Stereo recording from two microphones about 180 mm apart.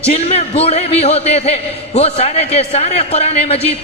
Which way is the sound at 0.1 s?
35° left (ahead or behind).